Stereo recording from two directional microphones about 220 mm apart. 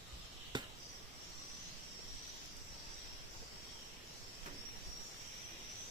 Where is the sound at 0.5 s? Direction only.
20° right (ahead or behind).